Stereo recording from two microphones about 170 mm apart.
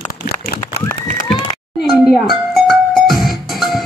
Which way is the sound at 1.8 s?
Centre (ahead or behind).